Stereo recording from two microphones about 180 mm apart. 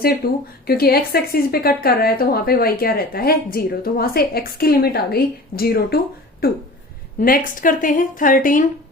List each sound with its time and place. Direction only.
0.2 s a woman's voice: 55° left (ahead or behind)